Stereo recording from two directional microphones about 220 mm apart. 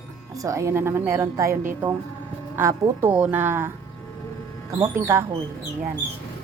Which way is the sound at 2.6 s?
10° right (ahead or behind).